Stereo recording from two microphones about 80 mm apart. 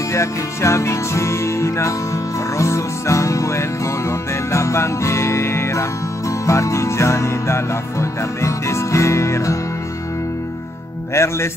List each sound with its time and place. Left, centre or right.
0.1 s music: left
11.1 s music: left